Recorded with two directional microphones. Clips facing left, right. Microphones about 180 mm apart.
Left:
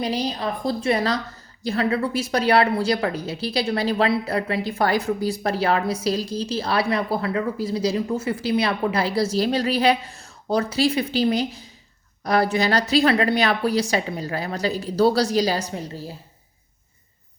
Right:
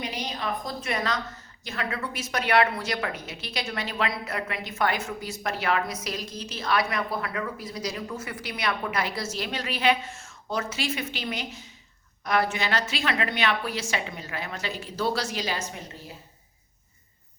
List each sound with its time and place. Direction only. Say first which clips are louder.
0.0 s a woman's voice: left 8 dB; 35° left (ahead or behind)